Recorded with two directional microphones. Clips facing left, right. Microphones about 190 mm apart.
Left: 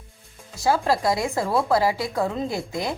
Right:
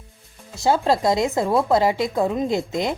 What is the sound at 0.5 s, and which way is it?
Speech, 25° right (ahead or behind).